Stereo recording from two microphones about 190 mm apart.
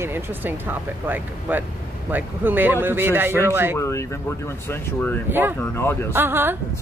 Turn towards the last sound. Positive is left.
turn(degrees=-10)  # may be behind; listen again after turning